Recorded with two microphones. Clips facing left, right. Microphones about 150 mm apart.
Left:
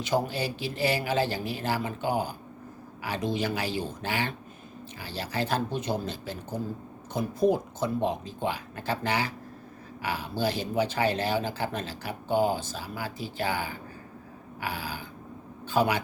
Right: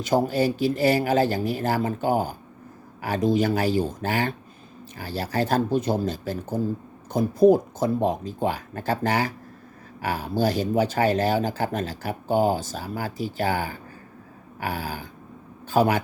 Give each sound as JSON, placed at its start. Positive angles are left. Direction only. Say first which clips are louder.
{"t": 0.0, "sound": "speech", "louder": "right 6 dB", "side_deg": -45}